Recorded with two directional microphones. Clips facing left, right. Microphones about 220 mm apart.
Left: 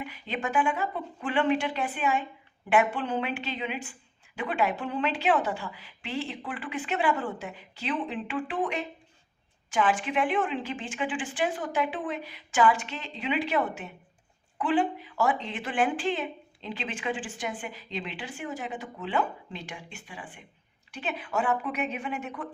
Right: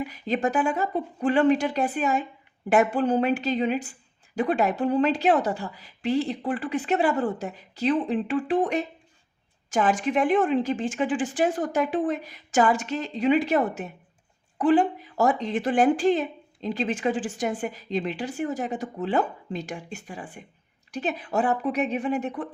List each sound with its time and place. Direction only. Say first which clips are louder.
0.0 s speech: right 8 dB; 40° right (ahead or behind)